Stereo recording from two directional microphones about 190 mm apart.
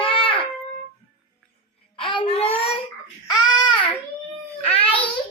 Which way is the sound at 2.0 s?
25° left (ahead or behind).